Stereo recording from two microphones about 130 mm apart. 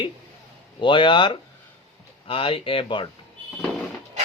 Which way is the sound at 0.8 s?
40° left (ahead or behind).